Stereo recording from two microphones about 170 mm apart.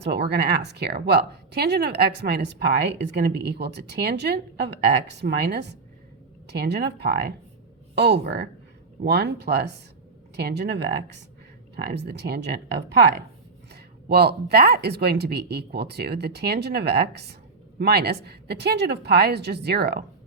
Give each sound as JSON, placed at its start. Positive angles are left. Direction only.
{"t": 0.0, "sound": "speech", "side_deg": -75}
{"t": 7.9, "sound": "speech", "side_deg": -80}
{"t": 14.1, "sound": "speech", "side_deg": -70}